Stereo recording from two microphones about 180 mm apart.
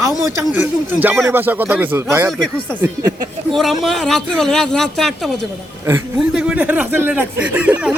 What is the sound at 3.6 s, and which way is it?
Speech, centre (ahead or behind).